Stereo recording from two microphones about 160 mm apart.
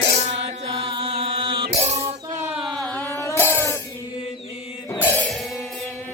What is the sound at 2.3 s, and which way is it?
Music, 15° right (ahead or behind).